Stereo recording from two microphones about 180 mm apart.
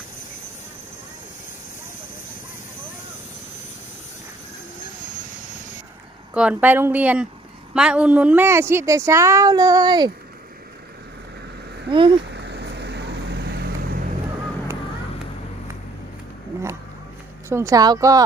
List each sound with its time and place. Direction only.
6.3 s speech: 5° right (ahead or behind); by 10.1 s 25° right (ahead or behind)
11.9 s speech: 30° right (ahead or behind)
12.3 s vehicle: 70° right (ahead or behind)
17.5 s speech: 15° right (ahead or behind)